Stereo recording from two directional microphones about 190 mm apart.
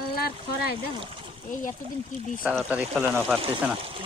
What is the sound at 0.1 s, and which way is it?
Speech, 55° left (ahead or behind).